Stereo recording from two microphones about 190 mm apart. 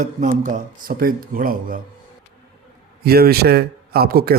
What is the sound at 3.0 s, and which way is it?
A man's voice, 55° right (ahead or behind).